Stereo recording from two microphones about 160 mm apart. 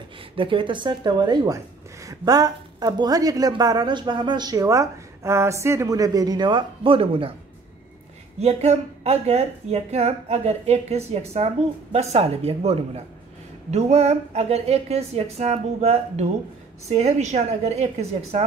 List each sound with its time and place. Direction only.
0.4 s speech: 30° right (ahead or behind)
8.4 s a woman's voice: 40° right (ahead or behind)